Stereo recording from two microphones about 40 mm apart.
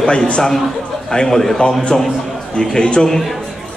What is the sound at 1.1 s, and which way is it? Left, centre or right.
A man's voice, centre.